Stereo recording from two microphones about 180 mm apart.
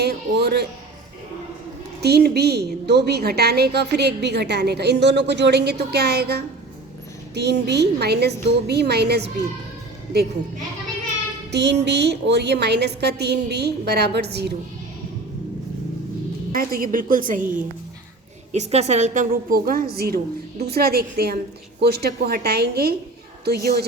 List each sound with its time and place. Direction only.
0.0 s a woman's voice: 65° right (ahead or behind)
2.0 s a woman's voice: 65° right (ahead or behind)
11.5 s a woman's voice: 70° right (ahead or behind)
16.5 s a woman's voice: 50° right (ahead or behind)
18.5 s a woman's voice: 40° right (ahead or behind); by 23.8 s 60° right (ahead or behind)